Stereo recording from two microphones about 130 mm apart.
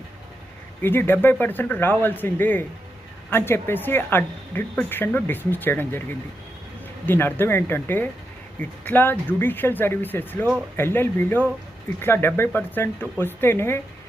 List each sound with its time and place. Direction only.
0.8 s a man's voice: 15° left (ahead or behind)
7.0 s a man's voice: 15° left (ahead or behind)